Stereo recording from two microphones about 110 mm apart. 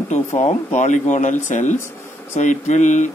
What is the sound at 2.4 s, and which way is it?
Speech, 90° left.